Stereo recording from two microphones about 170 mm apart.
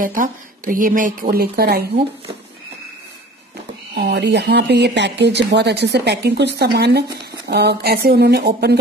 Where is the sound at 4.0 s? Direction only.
85° right.